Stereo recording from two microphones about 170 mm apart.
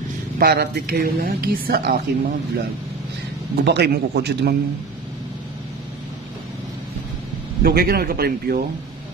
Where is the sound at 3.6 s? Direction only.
80° right.